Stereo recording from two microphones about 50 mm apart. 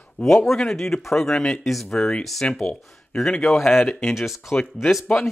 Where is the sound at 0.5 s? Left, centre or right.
Centre.